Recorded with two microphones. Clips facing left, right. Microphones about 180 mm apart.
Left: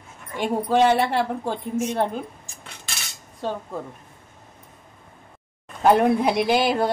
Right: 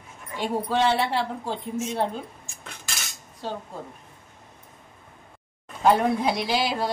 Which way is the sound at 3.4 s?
55° left (ahead or behind).